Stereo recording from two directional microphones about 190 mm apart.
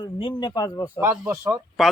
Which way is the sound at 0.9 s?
10° right (ahead or behind).